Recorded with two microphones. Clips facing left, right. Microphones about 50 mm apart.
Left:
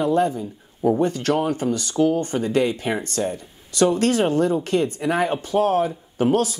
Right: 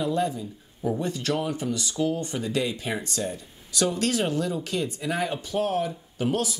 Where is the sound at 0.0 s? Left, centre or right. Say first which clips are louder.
Left 6 dB; left.